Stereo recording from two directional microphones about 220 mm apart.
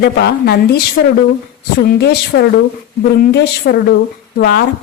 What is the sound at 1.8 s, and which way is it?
Speech, 50° left (ahead or behind).